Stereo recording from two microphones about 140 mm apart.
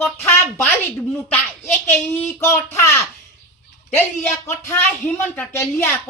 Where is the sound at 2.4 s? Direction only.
20° left (ahead or behind).